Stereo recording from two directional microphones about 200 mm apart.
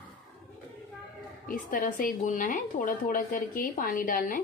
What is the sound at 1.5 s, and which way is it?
Speech, 45° left (ahead or behind).